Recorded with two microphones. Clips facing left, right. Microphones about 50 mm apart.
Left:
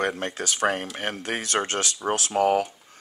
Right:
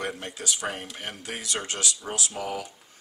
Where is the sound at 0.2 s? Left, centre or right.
Left.